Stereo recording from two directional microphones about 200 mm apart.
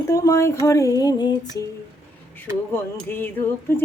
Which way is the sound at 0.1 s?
15° left (ahead or behind).